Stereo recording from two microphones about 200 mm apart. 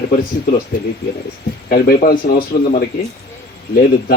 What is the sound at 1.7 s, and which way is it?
Speech, 50° left (ahead or behind).